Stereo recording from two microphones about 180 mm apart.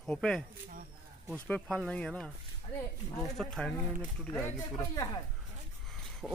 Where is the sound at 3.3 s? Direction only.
5° left (ahead or behind).